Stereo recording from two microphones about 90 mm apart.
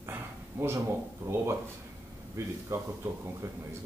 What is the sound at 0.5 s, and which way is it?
Speech, 20° right (ahead or behind).